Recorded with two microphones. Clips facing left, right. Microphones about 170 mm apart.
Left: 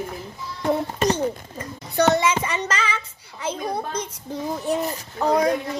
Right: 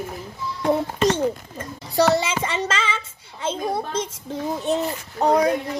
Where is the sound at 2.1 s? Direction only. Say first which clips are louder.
Left 1 dB; 30° right (ahead or behind).